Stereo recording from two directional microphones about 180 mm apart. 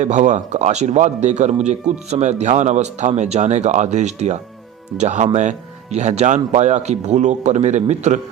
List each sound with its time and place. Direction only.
0.0 s a man's voice: 40° right (ahead or behind)